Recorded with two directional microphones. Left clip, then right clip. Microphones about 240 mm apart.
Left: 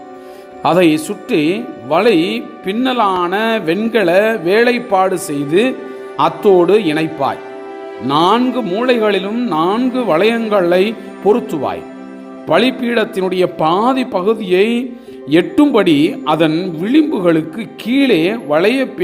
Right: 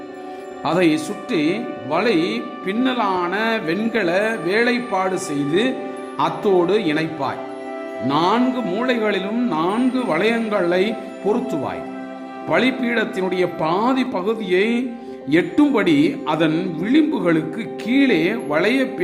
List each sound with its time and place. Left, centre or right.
0.6 s a man's voice: centre